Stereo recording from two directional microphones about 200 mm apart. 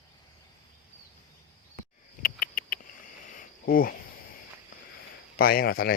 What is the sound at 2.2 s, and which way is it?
Cricket, 45° left (ahead or behind).